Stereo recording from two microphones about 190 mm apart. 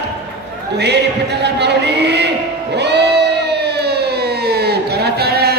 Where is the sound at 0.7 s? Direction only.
60° right (ahead or behind).